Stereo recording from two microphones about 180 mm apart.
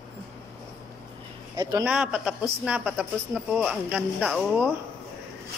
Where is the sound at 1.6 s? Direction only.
20° right (ahead or behind).